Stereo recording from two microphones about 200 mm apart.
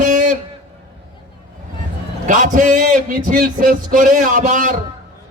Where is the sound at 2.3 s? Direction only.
40° right (ahead or behind).